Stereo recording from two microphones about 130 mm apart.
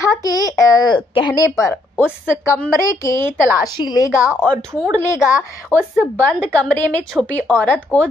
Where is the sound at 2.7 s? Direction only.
25° left (ahead or behind).